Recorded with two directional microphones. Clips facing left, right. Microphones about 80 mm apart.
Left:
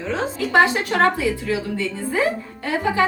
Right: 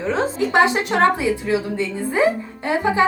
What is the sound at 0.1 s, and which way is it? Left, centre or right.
A woman's voice, right.